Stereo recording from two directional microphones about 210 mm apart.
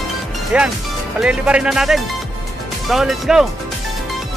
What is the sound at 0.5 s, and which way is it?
Speech, 5° right (ahead or behind).